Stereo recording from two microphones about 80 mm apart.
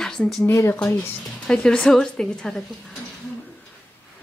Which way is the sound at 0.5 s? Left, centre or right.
Left.